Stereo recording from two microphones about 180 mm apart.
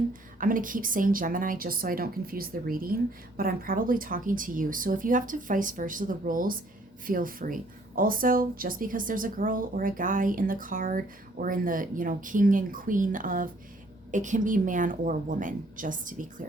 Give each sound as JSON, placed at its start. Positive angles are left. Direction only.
{"t": 0.1, "sound": "a woman's voice", "side_deg": -50}